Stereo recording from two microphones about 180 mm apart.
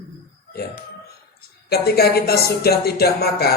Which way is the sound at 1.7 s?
60° left (ahead or behind).